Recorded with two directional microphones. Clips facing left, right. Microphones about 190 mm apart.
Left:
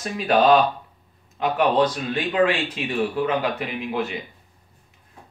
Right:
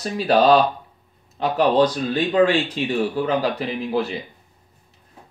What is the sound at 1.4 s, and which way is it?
Speech, 35° right (ahead or behind).